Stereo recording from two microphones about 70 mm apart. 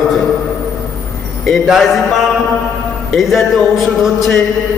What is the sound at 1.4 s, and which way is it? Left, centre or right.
A man's voice, centre.